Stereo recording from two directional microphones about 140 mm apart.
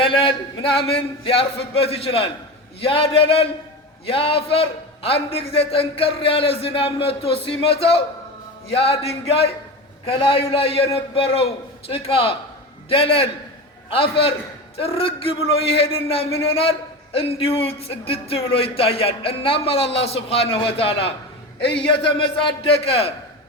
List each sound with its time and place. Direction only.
0.0 s a man's voice: 40° left (ahead or behind)
22.2 s a man's voice: 45° left (ahead or behind)